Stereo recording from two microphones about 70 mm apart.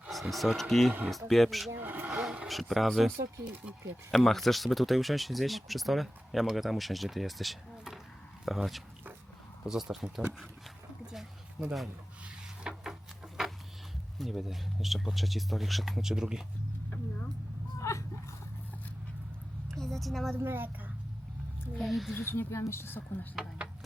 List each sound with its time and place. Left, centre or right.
0.1 s speech: centre
1.7 s a sound: right
2.5 s speech: centre
4.1 s speech: centre
11.6 s speech: centre
12.6 s a sound: centre
14.2 s speech: centre
17.7 s a sound: left
19.8 s a woman's voice: centre
20.3 s a woman's voice: right
21.8 s speech: centre
22.1 s speech: left